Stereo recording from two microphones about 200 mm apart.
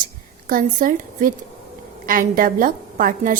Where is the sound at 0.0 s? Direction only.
45° right (ahead or behind).